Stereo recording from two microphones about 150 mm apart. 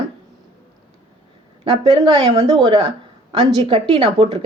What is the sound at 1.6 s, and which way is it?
Speech, 40° right (ahead or behind).